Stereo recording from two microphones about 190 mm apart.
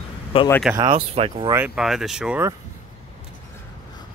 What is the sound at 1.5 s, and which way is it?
Speech, 5° right (ahead or behind).